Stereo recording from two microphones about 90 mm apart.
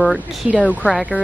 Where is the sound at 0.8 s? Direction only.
10° right (ahead or behind).